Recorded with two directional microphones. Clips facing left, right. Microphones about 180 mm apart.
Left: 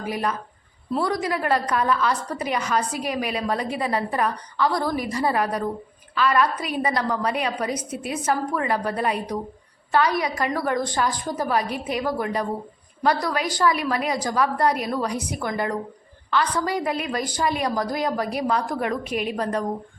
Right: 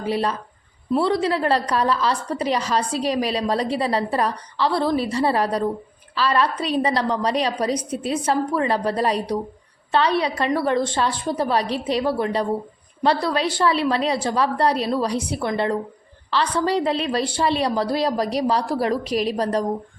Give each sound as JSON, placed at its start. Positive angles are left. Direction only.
{"t": 0.0, "sound": "a woman's voice", "side_deg": -30}